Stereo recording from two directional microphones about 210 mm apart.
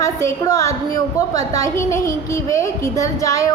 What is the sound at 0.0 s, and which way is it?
A woman's voice, 15° left (ahead or behind).